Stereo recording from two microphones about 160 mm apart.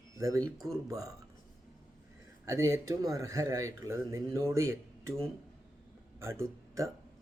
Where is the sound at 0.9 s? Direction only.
20° right (ahead or behind).